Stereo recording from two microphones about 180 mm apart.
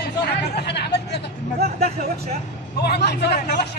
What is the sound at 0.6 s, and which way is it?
Hubbub, 65° left (ahead or behind).